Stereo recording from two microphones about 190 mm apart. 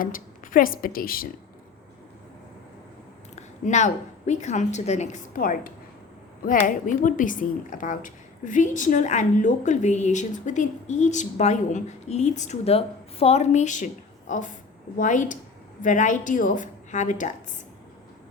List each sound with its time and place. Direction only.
0.0 s a woman's voice: 45° left (ahead or behind)
3.3 s a woman's voice: 40° left (ahead or behind)